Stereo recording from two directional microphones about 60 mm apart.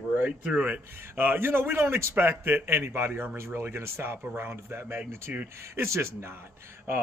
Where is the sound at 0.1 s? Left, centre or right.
Right.